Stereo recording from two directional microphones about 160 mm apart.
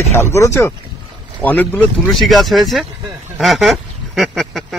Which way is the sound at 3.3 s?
Centre (ahead or behind).